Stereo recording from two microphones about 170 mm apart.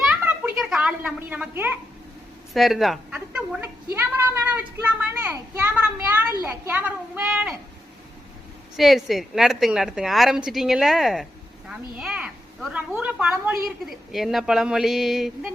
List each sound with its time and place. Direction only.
0.5 s a woman's voice: 5° right (ahead or behind)
2.5 s a woman's voice: centre (ahead or behind)
3.9 s a sound: 10° right (ahead or behind)
6.4 s a child's voice: 10° right (ahead or behind)
8.7 s a woman's voice: centre (ahead or behind)
11.7 s a sound: 5° right (ahead or behind)
12.7 s a child's voice: 10° right (ahead or behind)